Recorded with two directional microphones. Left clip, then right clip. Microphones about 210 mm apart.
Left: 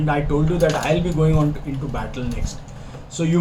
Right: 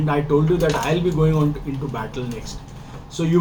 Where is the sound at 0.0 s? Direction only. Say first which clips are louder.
Right 2 dB; 10° right (ahead or behind).